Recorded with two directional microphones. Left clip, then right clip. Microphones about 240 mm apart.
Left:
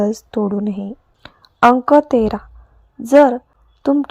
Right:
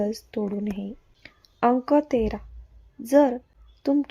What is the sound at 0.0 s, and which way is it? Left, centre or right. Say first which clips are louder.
Speech: left 9 dB; left.